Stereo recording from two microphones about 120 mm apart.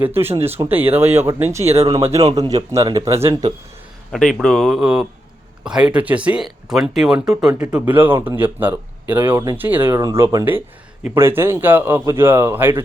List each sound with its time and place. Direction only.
0.0 s speech: 20° right (ahead or behind)
1.6 s speech: 60° right (ahead or behind)
2.2 s speech: 30° right (ahead or behind)
4.4 s speech: centre (ahead or behind); by 12.8 s 15° right (ahead or behind)